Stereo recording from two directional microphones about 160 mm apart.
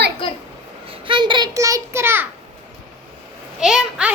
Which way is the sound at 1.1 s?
30° right (ahead or behind).